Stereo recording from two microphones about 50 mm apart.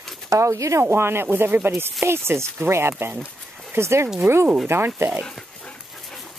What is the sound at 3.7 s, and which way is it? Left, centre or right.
Speech, right.